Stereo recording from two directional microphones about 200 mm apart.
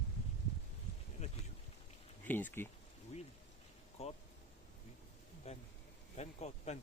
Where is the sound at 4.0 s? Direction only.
30° left (ahead or behind).